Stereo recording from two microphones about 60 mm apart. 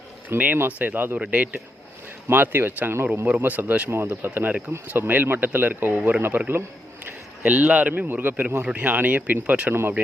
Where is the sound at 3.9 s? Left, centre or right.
Right.